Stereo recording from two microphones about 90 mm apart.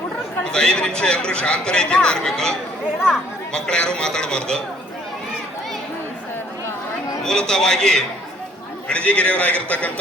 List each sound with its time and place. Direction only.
0.4 s a man's voice: 10° left (ahead or behind)
7.2 s a man's voice: 5° left (ahead or behind)